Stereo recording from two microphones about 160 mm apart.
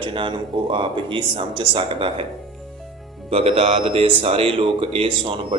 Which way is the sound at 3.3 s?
35° right (ahead or behind).